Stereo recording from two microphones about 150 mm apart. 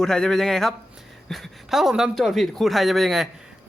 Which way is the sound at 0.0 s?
5° left (ahead or behind).